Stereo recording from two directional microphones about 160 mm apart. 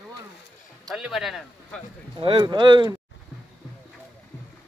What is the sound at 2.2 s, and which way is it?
Speech, 30° right (ahead or behind).